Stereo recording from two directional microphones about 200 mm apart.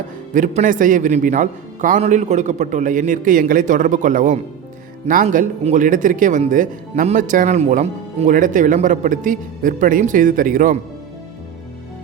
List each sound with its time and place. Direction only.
0.3 s speech: 40° right (ahead or behind)